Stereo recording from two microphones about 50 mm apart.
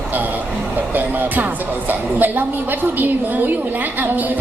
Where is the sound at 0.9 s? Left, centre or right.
Right.